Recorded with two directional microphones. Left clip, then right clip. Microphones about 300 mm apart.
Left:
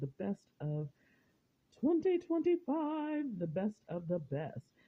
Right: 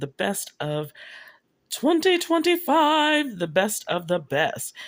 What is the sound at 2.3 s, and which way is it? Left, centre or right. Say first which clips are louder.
Speech: right 13 dB; centre.